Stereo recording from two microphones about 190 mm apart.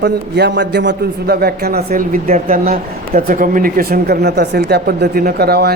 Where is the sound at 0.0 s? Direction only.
65° right (ahead or behind).